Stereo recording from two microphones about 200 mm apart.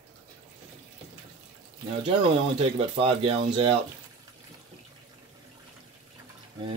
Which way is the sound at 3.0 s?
30° right (ahead or behind).